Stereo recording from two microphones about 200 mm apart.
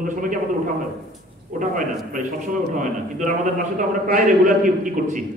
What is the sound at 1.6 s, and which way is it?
A man's voice, 40° right (ahead or behind).